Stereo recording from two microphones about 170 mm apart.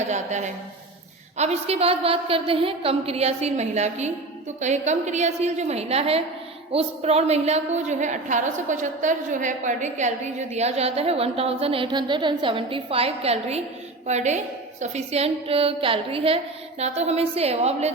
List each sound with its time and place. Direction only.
0.1 s a woman's voice: 45° right (ahead or behind)